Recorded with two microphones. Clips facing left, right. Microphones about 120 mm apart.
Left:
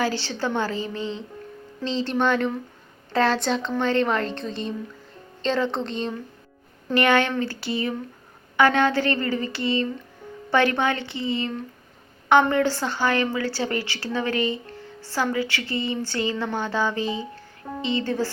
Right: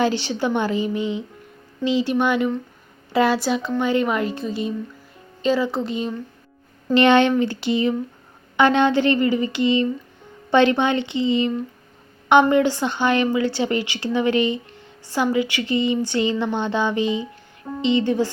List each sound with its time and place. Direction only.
0.0 s a woman's voice: 15° right (ahead or behind)
6.9 s a woman's voice: 20° right (ahead or behind)